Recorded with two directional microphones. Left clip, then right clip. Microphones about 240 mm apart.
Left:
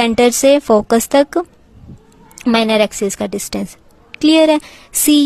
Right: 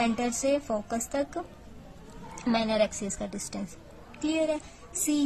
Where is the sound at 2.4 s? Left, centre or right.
Left.